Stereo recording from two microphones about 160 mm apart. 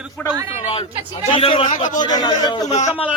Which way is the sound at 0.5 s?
35° left (ahead or behind).